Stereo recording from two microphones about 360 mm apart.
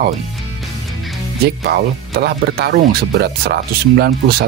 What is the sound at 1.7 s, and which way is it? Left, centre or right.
Speech, right.